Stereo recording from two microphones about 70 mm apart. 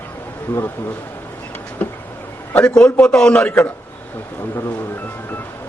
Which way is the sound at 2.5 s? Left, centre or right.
Centre.